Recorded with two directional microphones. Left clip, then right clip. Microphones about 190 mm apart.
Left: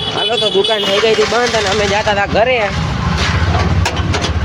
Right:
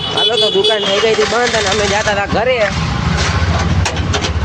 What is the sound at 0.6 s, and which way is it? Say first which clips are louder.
Speech: even; centre (ahead or behind).